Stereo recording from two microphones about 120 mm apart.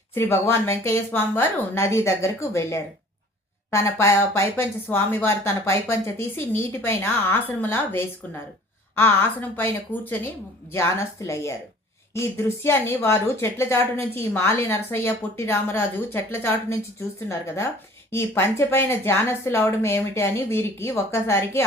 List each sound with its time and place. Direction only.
0.1 s a woman's voice: 20° left (ahead or behind)